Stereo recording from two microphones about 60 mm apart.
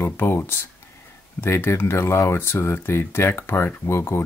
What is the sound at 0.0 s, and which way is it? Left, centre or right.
Speech, left.